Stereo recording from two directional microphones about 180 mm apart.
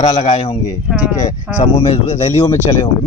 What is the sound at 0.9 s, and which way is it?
Speech, 5° right (ahead or behind).